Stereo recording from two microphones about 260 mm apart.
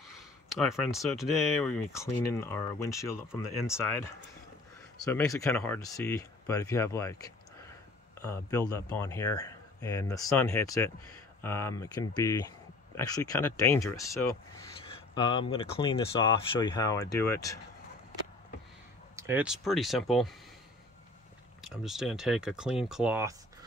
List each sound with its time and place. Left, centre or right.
0.5 s speech: centre
2.0 s speech: centre
19.1 s speech: centre
21.5 s speech: centre